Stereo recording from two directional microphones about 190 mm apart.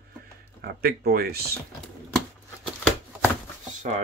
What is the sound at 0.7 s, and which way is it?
Speech, 55° right (ahead or behind).